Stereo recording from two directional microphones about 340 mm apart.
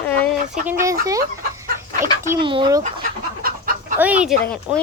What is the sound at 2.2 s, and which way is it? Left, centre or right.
Speech, centre.